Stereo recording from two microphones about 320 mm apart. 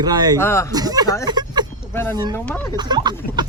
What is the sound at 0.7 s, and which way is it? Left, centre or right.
Speech, centre.